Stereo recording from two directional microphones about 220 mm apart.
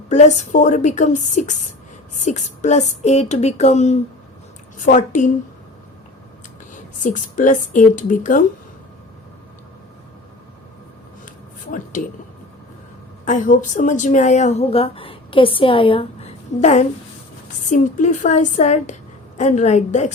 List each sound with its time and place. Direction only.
0.1 s a woman's voice: 35° left (ahead or behind)
7.0 s a woman's voice: 35° left (ahead or behind)
11.7 s speech: 35° left (ahead or behind)
13.2 s a woman's voice: 35° left (ahead or behind)